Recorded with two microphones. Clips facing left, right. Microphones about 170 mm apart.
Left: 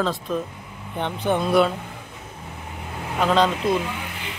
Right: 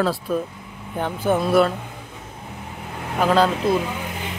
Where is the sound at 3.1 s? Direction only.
5° right (ahead or behind).